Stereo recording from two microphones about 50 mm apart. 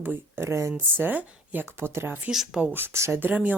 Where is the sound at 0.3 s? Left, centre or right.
Right.